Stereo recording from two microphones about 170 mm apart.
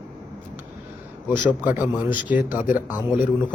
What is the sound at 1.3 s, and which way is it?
A man's voice, 10° right (ahead or behind).